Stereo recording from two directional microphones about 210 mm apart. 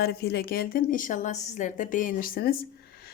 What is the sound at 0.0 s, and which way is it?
A woman's voice, 50° left (ahead or behind).